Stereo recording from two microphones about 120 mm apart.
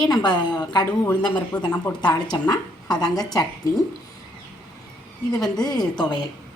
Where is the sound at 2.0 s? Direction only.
35° left (ahead or behind).